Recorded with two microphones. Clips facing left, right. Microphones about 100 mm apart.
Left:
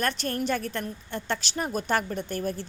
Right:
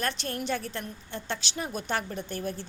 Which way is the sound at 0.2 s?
45° left (ahead or behind).